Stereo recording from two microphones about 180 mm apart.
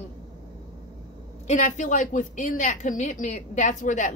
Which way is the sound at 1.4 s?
40° left (ahead or behind).